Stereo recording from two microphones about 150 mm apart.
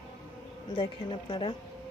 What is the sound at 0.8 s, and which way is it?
Speech, 35° left (ahead or behind).